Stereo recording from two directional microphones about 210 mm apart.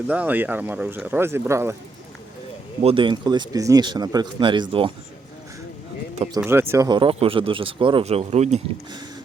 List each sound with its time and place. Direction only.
0.1 s speech: 5° right (ahead or behind)
2.8 s speech: 25° right (ahead or behind)
6.3 s speech: 10° right (ahead or behind); by 8.6 s 30° right (ahead or behind)